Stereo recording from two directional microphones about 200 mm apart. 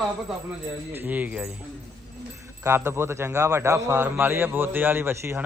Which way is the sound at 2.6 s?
10° right (ahead or behind).